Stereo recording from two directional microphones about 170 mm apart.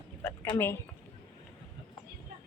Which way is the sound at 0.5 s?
15° left (ahead or behind).